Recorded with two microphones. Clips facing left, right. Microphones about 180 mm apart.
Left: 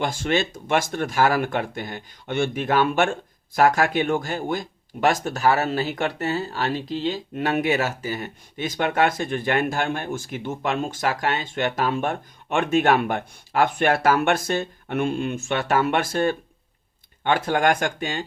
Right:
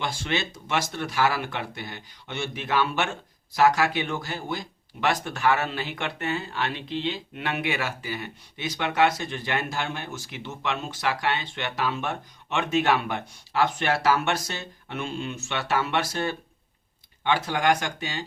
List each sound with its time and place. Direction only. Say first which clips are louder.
0.0 s speech: left 6 dB; 45° left (ahead or behind)